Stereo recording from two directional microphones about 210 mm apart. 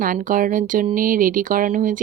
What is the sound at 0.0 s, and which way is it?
Speech, 40° right (ahead or behind).